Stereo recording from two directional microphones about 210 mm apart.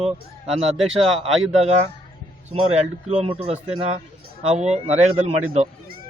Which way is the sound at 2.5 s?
30° right (ahead or behind).